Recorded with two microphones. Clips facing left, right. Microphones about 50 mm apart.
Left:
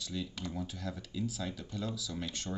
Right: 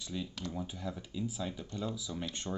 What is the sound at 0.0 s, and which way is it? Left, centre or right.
Speech, right.